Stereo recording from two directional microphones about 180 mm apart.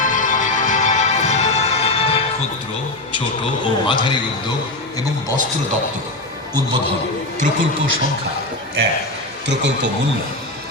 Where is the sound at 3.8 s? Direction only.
25° left (ahead or behind).